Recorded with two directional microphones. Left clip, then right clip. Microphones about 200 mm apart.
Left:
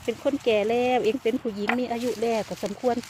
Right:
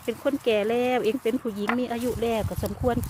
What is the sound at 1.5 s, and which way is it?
Speech, 45° right (ahead or behind).